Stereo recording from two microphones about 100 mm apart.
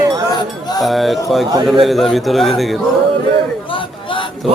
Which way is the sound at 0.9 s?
Centre (ahead or behind).